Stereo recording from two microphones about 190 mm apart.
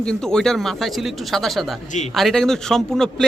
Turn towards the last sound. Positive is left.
turn(degrees=0)  # may be behind; listen again after turning